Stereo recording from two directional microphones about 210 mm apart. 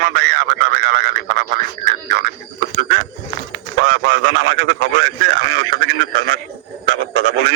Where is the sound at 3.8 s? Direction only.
65° right (ahead or behind).